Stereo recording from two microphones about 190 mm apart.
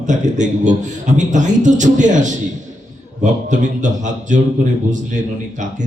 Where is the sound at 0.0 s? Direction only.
40° right (ahead or behind).